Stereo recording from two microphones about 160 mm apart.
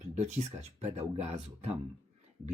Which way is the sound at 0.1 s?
45° right (ahead or behind).